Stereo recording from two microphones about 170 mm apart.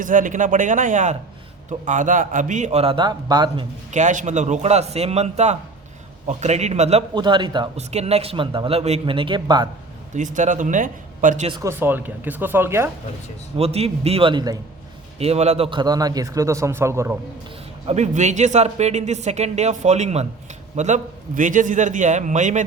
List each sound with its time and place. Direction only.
0.0 s a man's voice: 50° right (ahead or behind); by 3.7 s 25° right (ahead or behind)
3.9 s speech: 45° right (ahead or behind)
7.1 s a man's voice: 25° right (ahead or behind)
7.8 s speech: 40° right (ahead or behind)
10.2 s a man's voice: 45° right (ahead or behind)
11.6 s speech: 15° right (ahead or behind)
13.6 s speech: 35° right (ahead or behind)
15.2 s a man's voice: 40° right (ahead or behind); by 17.2 s 15° right (ahead or behind)
17.8 s a man's voice: 40° right (ahead or behind)